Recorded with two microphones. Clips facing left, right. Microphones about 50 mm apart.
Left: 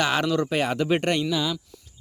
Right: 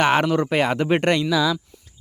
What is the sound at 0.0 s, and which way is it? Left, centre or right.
Speech, right.